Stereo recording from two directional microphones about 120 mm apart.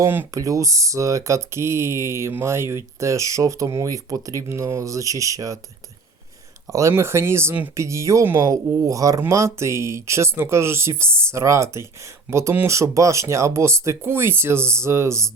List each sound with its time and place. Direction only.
0.0 s speech: 20° right (ahead or behind)
6.9 s speech: 20° right (ahead or behind)